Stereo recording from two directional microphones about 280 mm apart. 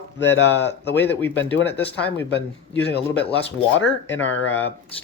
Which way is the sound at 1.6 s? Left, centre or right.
Left.